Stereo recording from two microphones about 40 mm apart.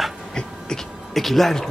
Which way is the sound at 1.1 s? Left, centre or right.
Centre.